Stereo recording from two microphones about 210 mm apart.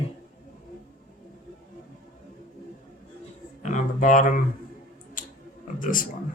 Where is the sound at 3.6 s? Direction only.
35° left (ahead or behind).